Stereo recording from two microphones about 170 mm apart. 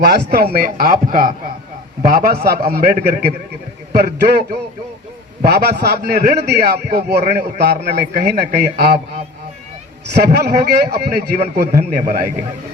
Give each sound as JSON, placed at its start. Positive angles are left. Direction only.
{"t": 0.0, "sound": "a man's voice", "side_deg": -70}
{"t": 10.2, "sound": "a man's voice", "side_deg": -75}